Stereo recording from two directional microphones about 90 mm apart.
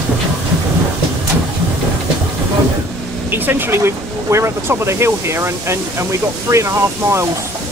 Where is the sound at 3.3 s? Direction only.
20° right (ahead or behind).